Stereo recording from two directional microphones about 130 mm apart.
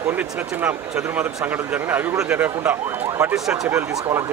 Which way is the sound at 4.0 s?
25° right (ahead or behind).